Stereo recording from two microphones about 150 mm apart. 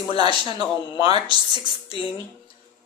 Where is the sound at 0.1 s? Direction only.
40° left (ahead or behind).